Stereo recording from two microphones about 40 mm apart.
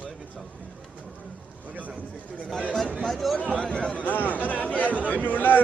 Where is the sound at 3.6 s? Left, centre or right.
Left.